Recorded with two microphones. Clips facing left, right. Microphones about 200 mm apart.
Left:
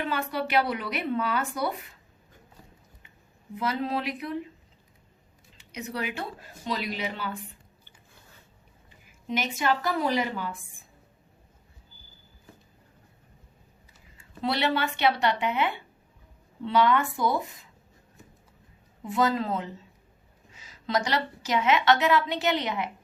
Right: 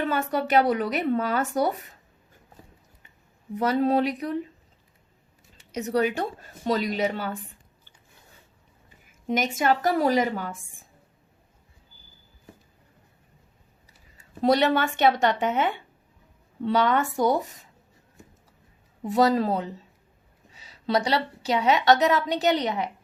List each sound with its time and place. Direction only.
0.0 s speech: 45° right (ahead or behind)
3.5 s a woman's voice: 40° right (ahead or behind)
5.7 s a woman's voice: 40° right (ahead or behind)
9.2 s speech: 45° right (ahead or behind)
14.2 s a woman's voice: 45° right (ahead or behind)
19.0 s a woman's voice: 40° right (ahead or behind)